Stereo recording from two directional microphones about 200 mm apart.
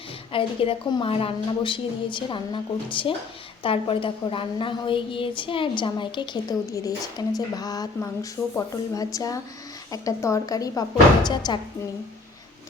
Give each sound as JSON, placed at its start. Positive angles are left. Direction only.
{"t": 0.3, "sound": "a woman's voice", "side_deg": 25}